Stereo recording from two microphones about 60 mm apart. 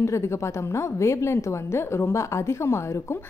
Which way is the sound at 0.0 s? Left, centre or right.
Left.